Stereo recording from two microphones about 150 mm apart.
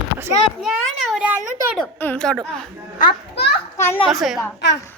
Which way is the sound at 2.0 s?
10° left (ahead or behind).